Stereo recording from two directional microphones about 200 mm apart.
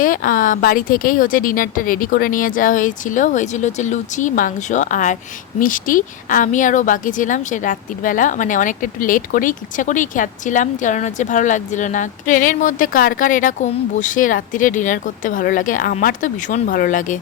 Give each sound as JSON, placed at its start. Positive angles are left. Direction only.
{"t": 0.0, "sound": "a woman's voice", "side_deg": 45}